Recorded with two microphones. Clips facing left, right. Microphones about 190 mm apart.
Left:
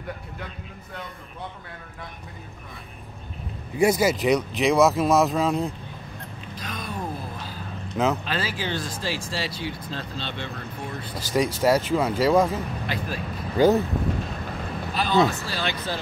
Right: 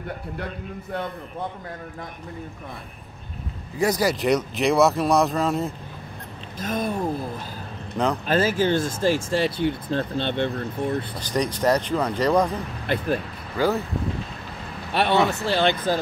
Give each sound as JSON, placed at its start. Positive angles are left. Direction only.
{"t": 3.8, "sound": "speech", "side_deg": 5}
{"t": 6.6, "sound": "a sound", "side_deg": -50}
{"t": 8.0, "sound": "speech", "side_deg": 5}
{"t": 8.3, "sound": "speech", "side_deg": -45}
{"t": 11.1, "sound": "speech", "side_deg": 5}
{"t": 12.8, "sound": "speech", "side_deg": -55}
{"t": 13.6, "sound": "speech", "side_deg": 25}
{"t": 14.9, "sound": "speech", "side_deg": -70}